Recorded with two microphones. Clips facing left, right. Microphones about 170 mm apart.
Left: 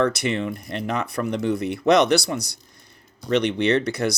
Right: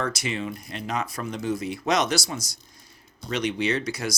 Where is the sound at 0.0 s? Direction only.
60° left (ahead or behind).